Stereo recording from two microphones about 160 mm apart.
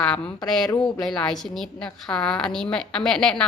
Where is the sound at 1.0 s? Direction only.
5° left (ahead or behind).